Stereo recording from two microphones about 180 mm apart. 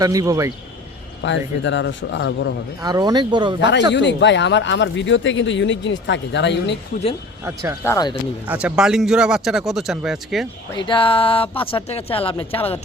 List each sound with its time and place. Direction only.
0.0 s speech: 20° right (ahead or behind)
1.2 s speech: 85° left
2.8 s speech: 20° right (ahead or behind)
3.6 s speech: 75° left (ahead or behind)
7.4 s speech: 15° right (ahead or behind)
7.9 s speech: 20° left (ahead or behind)
8.4 s speech: 5° right (ahead or behind)
10.8 s speech: 25° left (ahead or behind)